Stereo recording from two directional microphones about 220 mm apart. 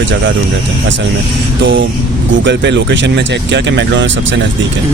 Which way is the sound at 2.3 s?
55° right (ahead or behind).